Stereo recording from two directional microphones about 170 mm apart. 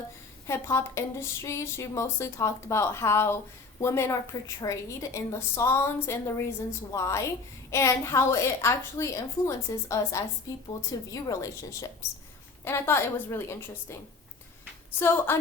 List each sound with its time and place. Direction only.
0.4 s a woman's voice: 15° left (ahead or behind)
14.9 s speech: 15° left (ahead or behind)